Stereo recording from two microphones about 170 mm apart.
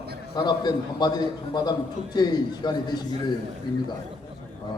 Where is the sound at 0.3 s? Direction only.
25° left (ahead or behind).